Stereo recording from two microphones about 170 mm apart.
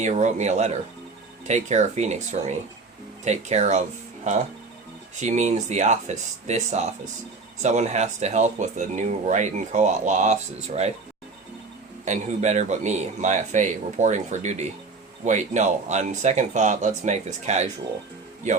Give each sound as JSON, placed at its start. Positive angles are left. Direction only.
{"t": 0.0, "sound": "speech", "side_deg": -45}
{"t": 12.0, "sound": "speech", "side_deg": -45}